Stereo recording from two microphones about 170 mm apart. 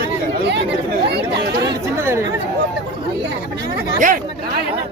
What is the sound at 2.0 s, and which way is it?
Chatter, 15° right (ahead or behind).